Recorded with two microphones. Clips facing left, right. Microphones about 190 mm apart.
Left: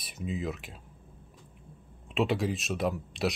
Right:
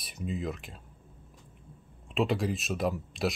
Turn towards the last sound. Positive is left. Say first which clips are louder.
# even
turn(degrees=0)  # may be behind; listen again after turning